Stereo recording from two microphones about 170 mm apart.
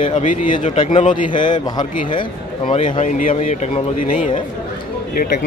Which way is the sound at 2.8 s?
45° left (ahead or behind).